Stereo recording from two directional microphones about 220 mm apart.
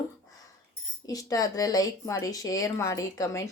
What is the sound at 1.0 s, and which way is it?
Speech, 15° left (ahead or behind).